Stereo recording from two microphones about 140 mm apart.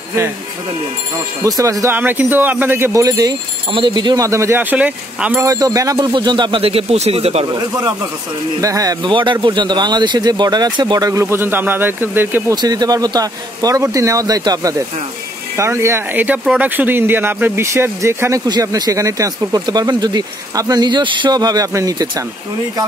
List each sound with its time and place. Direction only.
1.4 s speech: 25° right (ahead or behind)
2.0 s speech: 15° right (ahead or behind)
5.4 s speech: 25° right (ahead or behind); by 7.4 s 45° right (ahead or behind)
7.5 s speech: 25° right (ahead or behind)
12.5 s speech: 30° right (ahead or behind)